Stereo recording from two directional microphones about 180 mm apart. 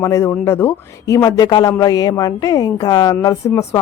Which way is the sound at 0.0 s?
15° left (ahead or behind).